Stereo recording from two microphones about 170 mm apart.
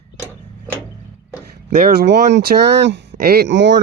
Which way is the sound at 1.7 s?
65° right (ahead or behind).